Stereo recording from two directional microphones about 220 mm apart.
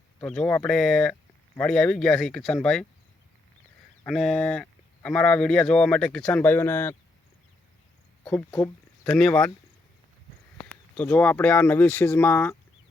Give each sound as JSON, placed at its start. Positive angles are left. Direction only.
{"t": 0.2, "sound": "speech", "side_deg": 5}
{"t": 4.0, "sound": "speech", "side_deg": 0}
{"t": 8.2, "sound": "speech", "side_deg": 5}
{"t": 8.4, "sound": "speech", "side_deg": 20}
{"t": 9.0, "sound": "speech", "side_deg": 5}
{"t": 10.6, "sound": "speech", "side_deg": 5}